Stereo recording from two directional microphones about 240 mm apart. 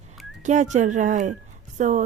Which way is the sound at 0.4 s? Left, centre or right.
Right.